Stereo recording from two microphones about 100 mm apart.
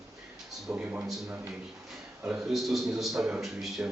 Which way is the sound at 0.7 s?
15° right (ahead or behind).